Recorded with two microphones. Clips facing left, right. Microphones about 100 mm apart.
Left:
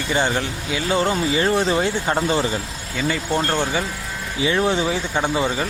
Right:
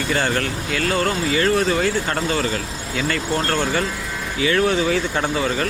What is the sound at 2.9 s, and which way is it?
Speech, 10° left (ahead or behind).